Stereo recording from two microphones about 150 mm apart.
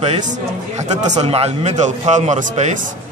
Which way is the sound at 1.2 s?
45° right (ahead or behind).